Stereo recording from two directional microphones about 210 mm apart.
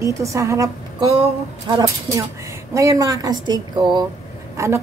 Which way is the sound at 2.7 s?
15° right (ahead or behind).